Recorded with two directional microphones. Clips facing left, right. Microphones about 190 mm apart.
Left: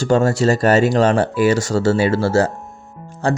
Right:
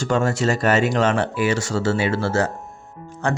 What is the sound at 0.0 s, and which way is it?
Speech, 35° left (ahead or behind).